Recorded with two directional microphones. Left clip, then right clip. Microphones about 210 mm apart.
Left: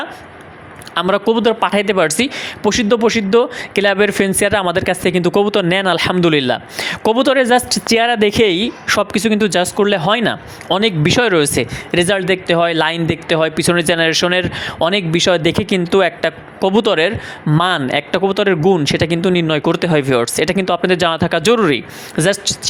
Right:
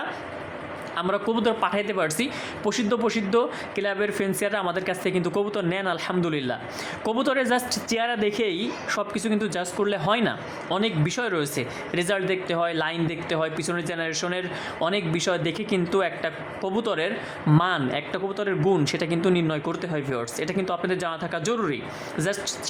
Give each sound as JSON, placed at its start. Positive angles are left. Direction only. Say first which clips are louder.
{"t": 0.9, "sound": "speech", "louder": "left 11 dB", "side_deg": 35}